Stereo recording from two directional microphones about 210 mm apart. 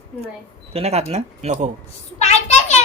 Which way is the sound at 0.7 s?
30° right (ahead or behind).